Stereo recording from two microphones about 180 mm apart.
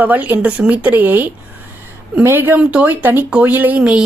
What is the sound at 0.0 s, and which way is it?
Speech, 10° right (ahead or behind).